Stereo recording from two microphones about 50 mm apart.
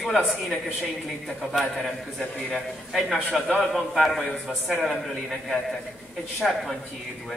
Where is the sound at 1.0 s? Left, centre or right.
Centre.